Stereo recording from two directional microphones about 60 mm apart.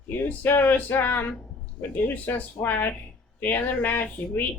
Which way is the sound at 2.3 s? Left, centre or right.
Left.